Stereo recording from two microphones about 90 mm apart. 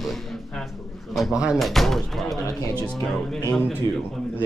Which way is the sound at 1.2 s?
5° right (ahead or behind).